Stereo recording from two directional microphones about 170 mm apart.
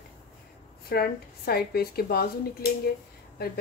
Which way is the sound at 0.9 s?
65° left (ahead or behind).